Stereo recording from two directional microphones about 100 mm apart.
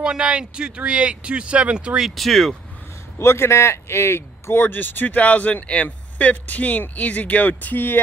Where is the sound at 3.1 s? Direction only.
25° left (ahead or behind).